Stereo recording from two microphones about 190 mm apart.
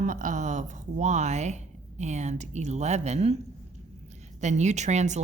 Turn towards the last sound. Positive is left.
turn(degrees=-40)  # may be behind; listen again after turning